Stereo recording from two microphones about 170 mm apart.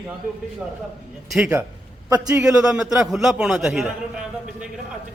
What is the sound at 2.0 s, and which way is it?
Speech, 20° right (ahead or behind).